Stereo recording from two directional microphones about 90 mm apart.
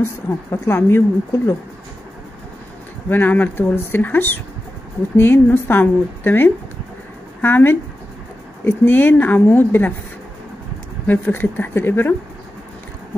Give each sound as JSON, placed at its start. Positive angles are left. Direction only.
{"t": 0.0, "sound": "speech", "side_deg": 30}
{"t": 3.1, "sound": "speech", "side_deg": 20}
{"t": 11.1, "sound": "speech", "side_deg": 25}